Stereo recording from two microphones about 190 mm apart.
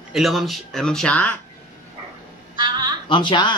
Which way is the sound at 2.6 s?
20° right (ahead or behind).